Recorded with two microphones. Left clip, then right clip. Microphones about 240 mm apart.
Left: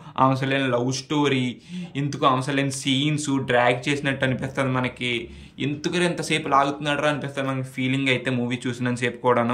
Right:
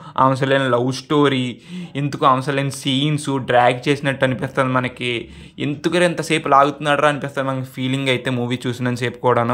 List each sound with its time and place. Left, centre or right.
0.1 s speech: centre